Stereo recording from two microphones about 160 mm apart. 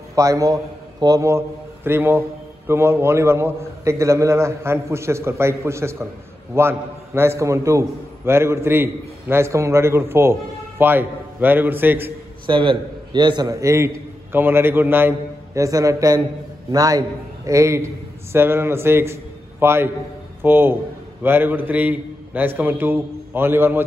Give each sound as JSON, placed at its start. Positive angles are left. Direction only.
{"t": 0.1, "sound": "a man's voice", "side_deg": -20}
{"t": 12.4, "sound": "a man's voice", "side_deg": -30}